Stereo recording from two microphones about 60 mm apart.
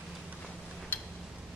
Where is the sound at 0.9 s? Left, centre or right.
Left.